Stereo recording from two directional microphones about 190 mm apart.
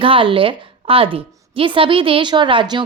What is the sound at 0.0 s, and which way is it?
A woman's voice, 30° right (ahead or behind).